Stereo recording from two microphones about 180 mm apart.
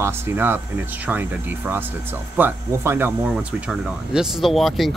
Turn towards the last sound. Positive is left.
turn(degrees=0)  # may be behind; listen again after turning